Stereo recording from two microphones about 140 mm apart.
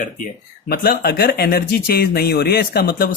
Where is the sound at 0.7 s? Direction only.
90° left.